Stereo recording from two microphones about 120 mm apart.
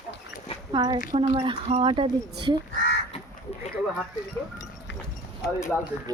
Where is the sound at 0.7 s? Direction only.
35° right (ahead or behind).